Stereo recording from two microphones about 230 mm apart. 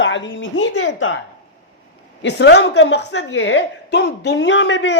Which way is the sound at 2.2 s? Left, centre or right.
Left.